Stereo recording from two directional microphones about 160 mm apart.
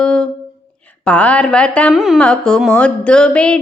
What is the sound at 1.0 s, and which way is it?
Speech, 10° left (ahead or behind).